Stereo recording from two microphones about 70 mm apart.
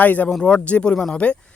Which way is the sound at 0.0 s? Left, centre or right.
Left.